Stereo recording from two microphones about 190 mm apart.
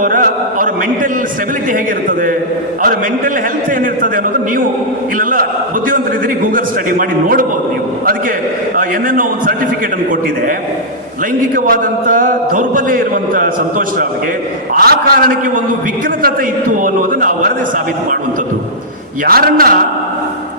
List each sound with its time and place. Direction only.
0.0 s a man's voice: 45° right (ahead or behind)
1.7 s a man's voice: 45° right (ahead or behind)
8.7 s a man's voice: 45° right (ahead or behind)
11.5 s a man's voice: 45° right (ahead or behind)
19.2 s a man's voice: 50° right (ahead or behind)